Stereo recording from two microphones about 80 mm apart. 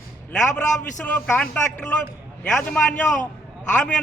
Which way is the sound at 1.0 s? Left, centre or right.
Centre.